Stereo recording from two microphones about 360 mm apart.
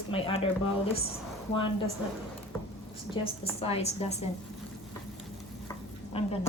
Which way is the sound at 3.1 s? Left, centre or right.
Centre.